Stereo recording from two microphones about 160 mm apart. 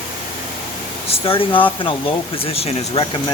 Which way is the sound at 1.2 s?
35° left (ahead or behind).